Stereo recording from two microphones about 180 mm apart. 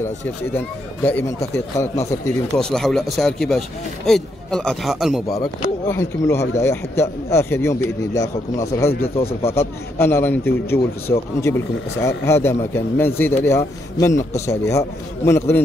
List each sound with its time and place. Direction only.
1.0 s speech: 10° left (ahead or behind)
2.5 s speech: centre (ahead or behind)
5.3 s speech: 15° left (ahead or behind)
9.9 s speech: 10° left (ahead or behind)